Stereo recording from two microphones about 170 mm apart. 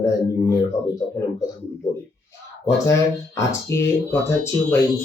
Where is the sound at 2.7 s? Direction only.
15° left (ahead or behind).